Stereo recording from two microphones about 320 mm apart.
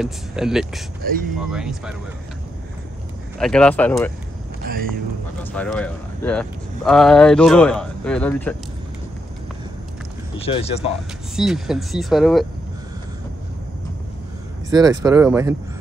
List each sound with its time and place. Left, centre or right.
0.0 s speech: centre
3.3 s speech: centre
5.4 s speech: centre
10.3 s speech: centre
11.3 s speech: centre
14.7 s speech: centre